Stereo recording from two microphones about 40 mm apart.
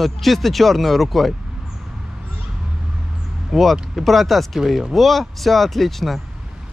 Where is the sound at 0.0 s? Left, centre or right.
Centre.